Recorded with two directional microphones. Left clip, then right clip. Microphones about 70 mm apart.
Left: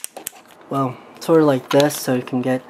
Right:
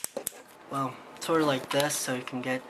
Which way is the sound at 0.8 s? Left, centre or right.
Left.